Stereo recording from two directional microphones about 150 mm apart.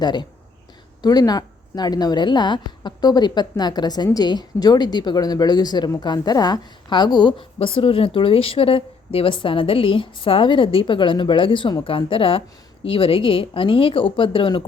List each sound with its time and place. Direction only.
0.0 s a woman's voice: 30° left (ahead or behind)